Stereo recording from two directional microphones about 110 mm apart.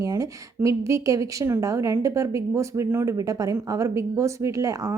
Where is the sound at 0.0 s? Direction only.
30° right (ahead or behind).